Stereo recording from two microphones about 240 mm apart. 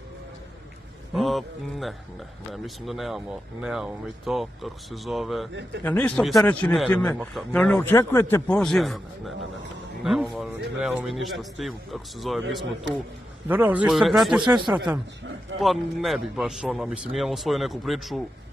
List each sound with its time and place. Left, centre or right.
1.1 s a man's voice: centre
5.5 s a man's voice: right
5.9 s a man's voice: centre
13.5 s a man's voice: centre
14.4 s speech: centre
15.6 s a man's voice: centre